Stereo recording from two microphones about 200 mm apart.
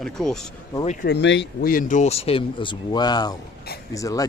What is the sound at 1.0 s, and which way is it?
Speech, 60° left (ahead or behind).